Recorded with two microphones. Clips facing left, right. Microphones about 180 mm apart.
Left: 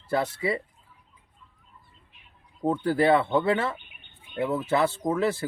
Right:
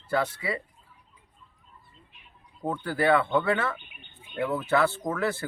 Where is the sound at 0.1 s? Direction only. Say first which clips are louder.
Left 2 dB; 30° left (ahead or behind).